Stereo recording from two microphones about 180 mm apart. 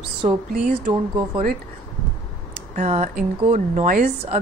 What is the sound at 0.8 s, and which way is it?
Speech, 30° right (ahead or behind).